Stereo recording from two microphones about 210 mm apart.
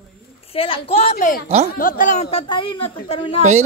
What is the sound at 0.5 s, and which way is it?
A man's voice, 25° left (ahead or behind).